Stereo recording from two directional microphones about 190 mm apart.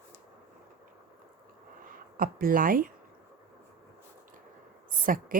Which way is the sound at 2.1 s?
50° right (ahead or behind).